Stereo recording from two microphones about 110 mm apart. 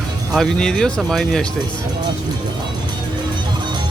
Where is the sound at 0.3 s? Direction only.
5° left (ahead or behind).